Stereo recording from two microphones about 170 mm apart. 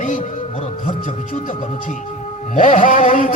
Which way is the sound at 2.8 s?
50° left (ahead or behind).